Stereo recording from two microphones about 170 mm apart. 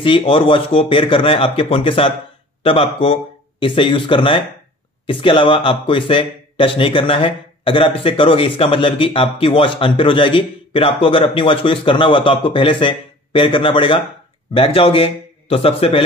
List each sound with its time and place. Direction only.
0.0 s speech: 30° left (ahead or behind)